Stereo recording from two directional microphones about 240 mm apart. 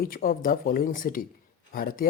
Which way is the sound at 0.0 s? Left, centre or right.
Left.